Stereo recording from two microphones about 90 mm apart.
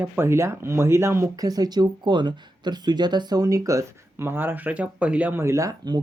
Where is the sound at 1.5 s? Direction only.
45° right (ahead or behind); by 5.4 s 15° right (ahead or behind).